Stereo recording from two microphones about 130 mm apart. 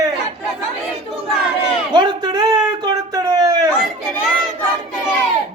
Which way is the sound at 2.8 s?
30° right (ahead or behind).